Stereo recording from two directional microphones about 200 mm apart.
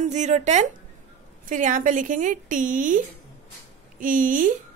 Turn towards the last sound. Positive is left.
turn(degrees=-40)  # may be behind; listen again after turning